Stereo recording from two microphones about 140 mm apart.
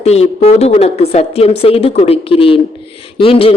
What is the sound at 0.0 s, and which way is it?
A woman's voice, 50° left (ahead or behind).